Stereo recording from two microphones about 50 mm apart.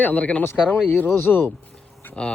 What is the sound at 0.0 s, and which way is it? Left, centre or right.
Speech, left.